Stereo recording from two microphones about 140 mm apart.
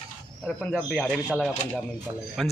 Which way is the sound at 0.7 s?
Centre (ahead or behind).